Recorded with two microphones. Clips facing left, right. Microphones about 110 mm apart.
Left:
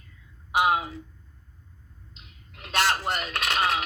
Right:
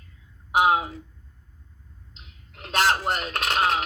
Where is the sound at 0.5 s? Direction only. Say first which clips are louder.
Right 3 dB; 40° right (ahead or behind).